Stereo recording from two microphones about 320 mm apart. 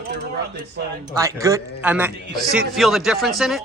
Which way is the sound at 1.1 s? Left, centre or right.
Centre.